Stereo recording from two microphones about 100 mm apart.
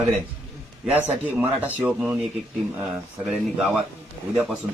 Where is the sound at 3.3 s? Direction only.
5° right (ahead or behind).